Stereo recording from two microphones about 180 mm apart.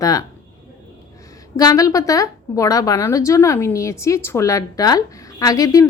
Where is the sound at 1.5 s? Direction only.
20° left (ahead or behind).